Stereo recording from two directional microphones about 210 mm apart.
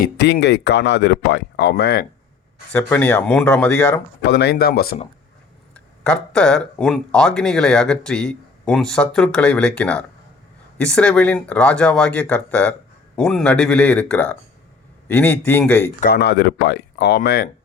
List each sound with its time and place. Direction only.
0.0 s speech: 55° left (ahead or behind)
2.7 s speech: 5° left (ahead or behind)
4.2 s speech: 50° left (ahead or behind)
5.7 s speech: 5° left (ahead or behind)
16.0 s speech: 50° left (ahead or behind)